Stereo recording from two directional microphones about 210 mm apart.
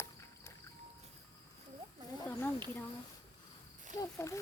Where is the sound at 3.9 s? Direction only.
15° left (ahead or behind).